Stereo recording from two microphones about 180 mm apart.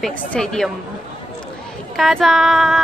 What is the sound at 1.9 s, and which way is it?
Speech, centre (ahead or behind).